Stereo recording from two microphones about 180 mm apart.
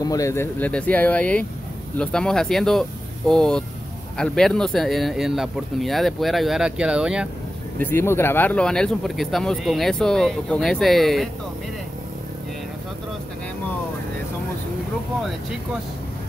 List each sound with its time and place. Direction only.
0.0 s speech: 20° left (ahead or behind); by 7.2 s 5° right (ahead or behind)
7.8 s speech: 15° left (ahead or behind)